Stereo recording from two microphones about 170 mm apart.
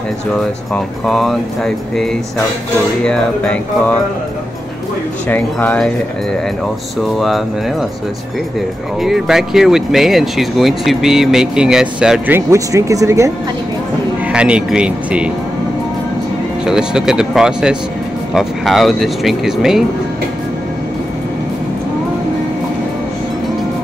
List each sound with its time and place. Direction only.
0.4 s speech: centre (ahead or behind)
5.3 s speech: 10° left (ahead or behind)
7.0 s speech: centre (ahead or behind)
9.0 s speech: centre (ahead or behind); by 13.3 s 15° right (ahead or behind)
14.3 s speech: 5° right (ahead or behind)
16.6 s speech: 5° right (ahead or behind)